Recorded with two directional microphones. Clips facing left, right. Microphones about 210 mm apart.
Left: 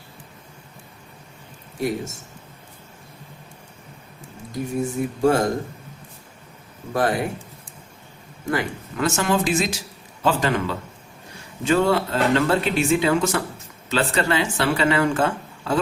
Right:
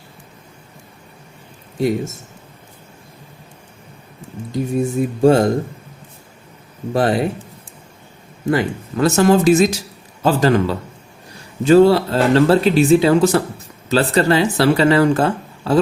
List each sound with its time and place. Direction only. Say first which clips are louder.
4.5 s speech: right 6 dB; 25° right (ahead or behind)
6.9 s speech: right 5 dB; 25° right (ahead or behind)
8.4 s speech: right 7 dB; 30° right (ahead or behind)